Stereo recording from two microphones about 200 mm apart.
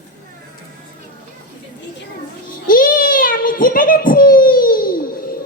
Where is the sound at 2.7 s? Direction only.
45° left (ahead or behind).